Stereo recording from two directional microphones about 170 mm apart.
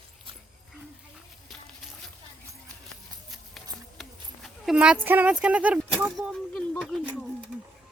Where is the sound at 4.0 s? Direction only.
Centre (ahead or behind).